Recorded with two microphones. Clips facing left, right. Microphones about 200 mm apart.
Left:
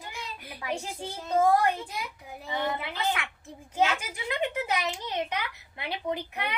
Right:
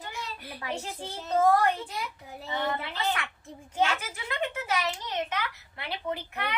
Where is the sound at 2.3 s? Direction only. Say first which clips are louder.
Even; 15° left (ahead or behind).